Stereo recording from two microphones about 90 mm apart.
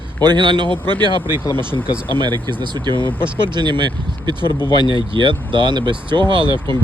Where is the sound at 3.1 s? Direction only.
25° left (ahead or behind).